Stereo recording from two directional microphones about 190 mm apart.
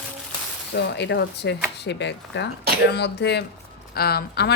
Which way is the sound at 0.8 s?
60° left (ahead or behind).